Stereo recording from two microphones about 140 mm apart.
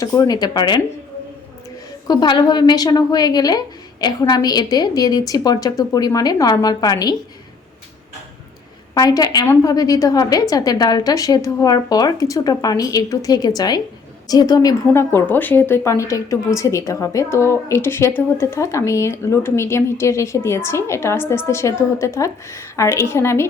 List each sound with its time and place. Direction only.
0.0 s a woman's voice: 25° left (ahead or behind)
2.0 s a woman's voice: 30° left (ahead or behind)
9.0 s a woman's voice: 25° left (ahead or behind)